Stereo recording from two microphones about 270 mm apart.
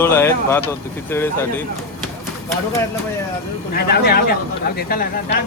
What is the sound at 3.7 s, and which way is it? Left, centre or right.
Speech, left.